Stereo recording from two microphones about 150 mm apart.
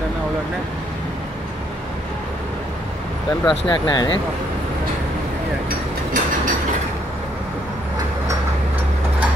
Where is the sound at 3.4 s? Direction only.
30° left (ahead or behind).